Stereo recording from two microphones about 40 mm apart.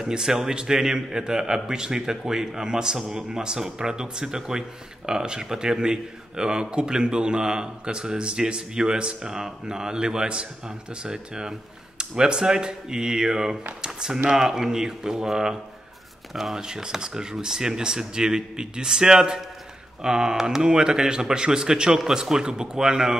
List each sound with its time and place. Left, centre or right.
0.0 s a man's voice: centre